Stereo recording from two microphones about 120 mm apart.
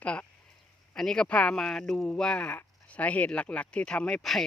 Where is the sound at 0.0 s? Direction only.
10° left (ahead or behind).